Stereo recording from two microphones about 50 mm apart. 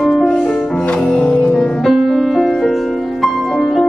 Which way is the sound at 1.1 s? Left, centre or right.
Left.